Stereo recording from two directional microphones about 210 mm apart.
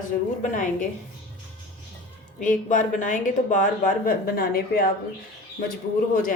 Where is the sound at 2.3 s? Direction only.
35° left (ahead or behind).